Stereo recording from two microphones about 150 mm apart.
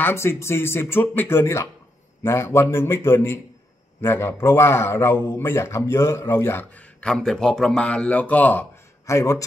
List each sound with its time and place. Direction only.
0.0 s a man's voice: 15° left (ahead or behind)